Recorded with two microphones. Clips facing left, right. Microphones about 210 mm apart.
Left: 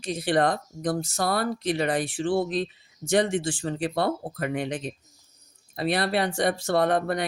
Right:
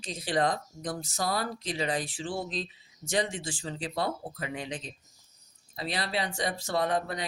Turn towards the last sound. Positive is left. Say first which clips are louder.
# left 6 dB
turn(degrees=60)  # may be behind; listen again after turning